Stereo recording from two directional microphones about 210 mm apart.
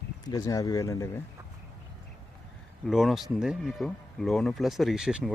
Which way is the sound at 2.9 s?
Centre (ahead or behind).